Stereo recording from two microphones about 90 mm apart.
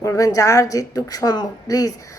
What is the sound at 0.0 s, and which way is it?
Speech, 35° left (ahead or behind).